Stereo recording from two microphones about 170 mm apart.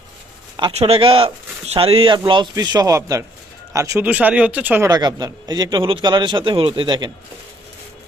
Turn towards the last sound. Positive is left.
turn(degrees=-25)  # may be behind; listen again after turning